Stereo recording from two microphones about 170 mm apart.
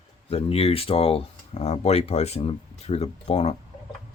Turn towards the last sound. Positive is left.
turn(degrees=40)  # may be behind; listen again after turning